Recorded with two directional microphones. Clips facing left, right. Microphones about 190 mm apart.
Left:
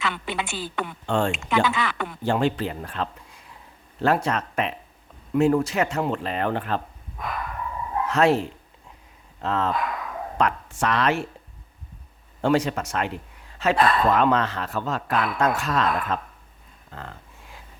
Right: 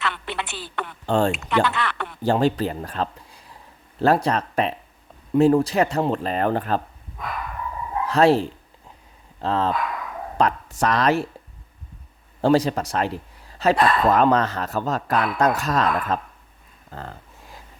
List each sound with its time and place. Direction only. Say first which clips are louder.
0.0 s a woman's voice: even; centre (ahead or behind)
1.0 s a man's voice: right 4 dB; 35° right (ahead or behind)
1.3 s a woman's voice: right 1 dB; centre (ahead or behind)
2.2 s a man's voice: right 3 dB; 35° right (ahead or behind)
8.0 s a man's voice: right 3 dB; 35° right (ahead or behind)
12.4 s a man's voice: right 3 dB; 35° right (ahead or behind)
16.9 s a sound: right 3 dB; 35° right (ahead or behind)